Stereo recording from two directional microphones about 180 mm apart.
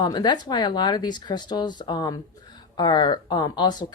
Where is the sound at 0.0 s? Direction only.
25° left (ahead or behind).